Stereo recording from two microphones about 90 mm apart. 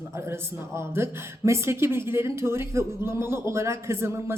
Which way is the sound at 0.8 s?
30° right (ahead or behind).